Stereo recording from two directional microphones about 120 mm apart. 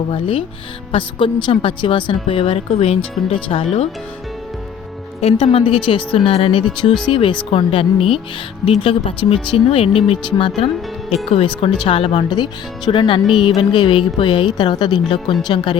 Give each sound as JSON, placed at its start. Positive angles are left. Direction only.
{"t": 0.1, "sound": "speech", "side_deg": 50}
{"t": 5.4, "sound": "speech", "side_deg": 55}